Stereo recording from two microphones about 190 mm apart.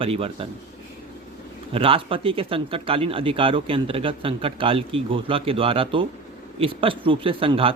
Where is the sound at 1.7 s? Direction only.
30° right (ahead or behind).